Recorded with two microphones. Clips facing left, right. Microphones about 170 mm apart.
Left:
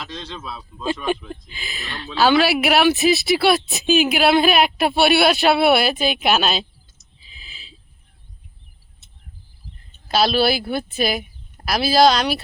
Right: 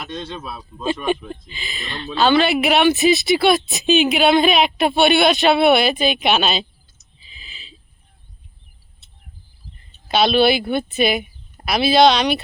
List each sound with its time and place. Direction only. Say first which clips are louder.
0.0 s speech: right 3 dB; 20° right (ahead or behind)
1.5 s a woman's voice: right 2 dB; 5° left (ahead or behind)
7.2 s a sound: right 1 dB; centre (ahead or behind)
10.1 s a woman's voice: right 3 dB; centre (ahead or behind)